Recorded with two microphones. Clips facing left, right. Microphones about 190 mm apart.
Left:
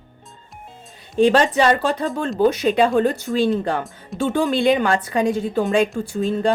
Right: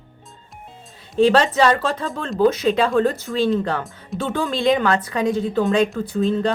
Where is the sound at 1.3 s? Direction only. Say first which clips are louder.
Even; 15° left (ahead or behind).